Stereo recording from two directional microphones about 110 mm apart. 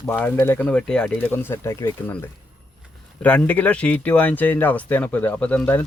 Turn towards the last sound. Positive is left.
turn(degrees=15)  # may be behind; listen again after turning